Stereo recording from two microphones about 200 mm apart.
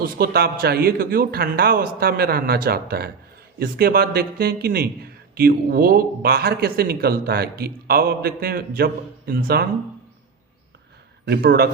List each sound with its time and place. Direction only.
0.0 s speech: 50° right (ahead or behind)
11.3 s speech: 50° right (ahead or behind)